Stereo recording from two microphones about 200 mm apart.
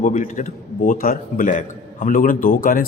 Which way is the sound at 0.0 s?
40° left (ahead or behind).